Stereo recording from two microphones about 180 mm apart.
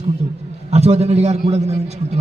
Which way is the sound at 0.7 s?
35° right (ahead or behind).